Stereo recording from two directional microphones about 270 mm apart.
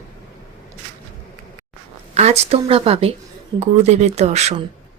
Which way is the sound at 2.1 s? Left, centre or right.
Right.